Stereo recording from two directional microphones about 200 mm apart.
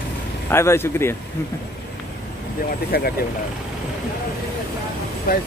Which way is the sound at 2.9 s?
50° left (ahead or behind).